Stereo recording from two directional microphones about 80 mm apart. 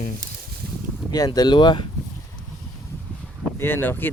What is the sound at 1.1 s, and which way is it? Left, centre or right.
Speech, left.